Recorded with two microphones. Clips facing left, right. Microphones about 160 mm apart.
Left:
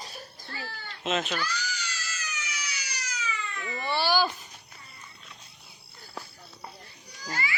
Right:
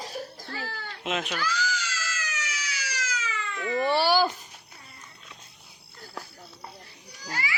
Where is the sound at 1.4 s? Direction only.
90° right.